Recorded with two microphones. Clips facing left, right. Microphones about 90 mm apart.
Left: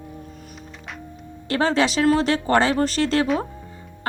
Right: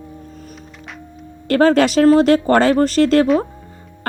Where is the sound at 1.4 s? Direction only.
50° right (ahead or behind).